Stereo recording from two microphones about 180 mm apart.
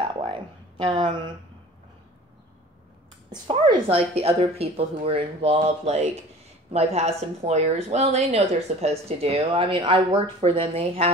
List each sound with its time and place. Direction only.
0.1 s a sound: 30° right (ahead or behind)
0.8 s speech: 25° right (ahead or behind)
3.4 s speech: 30° right (ahead or behind)